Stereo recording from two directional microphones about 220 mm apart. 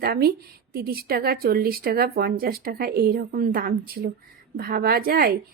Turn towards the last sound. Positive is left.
turn(degrees=-40)  # may be behind; listen again after turning